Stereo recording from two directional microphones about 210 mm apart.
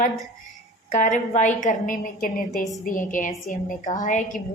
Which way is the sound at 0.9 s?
35° left (ahead or behind).